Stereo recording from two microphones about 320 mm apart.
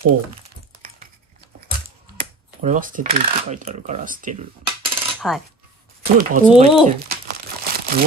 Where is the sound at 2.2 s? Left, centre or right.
Right.